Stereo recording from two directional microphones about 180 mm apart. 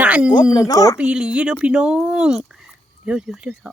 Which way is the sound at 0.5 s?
20° left (ahead or behind).